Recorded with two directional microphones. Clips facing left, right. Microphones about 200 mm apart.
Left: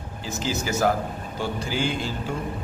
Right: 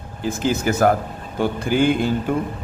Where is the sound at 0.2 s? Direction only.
55° right (ahead or behind).